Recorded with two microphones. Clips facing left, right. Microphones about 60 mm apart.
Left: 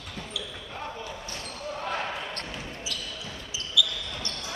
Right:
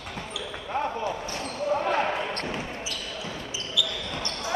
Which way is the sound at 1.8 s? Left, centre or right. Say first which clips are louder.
Right 6 dB; right.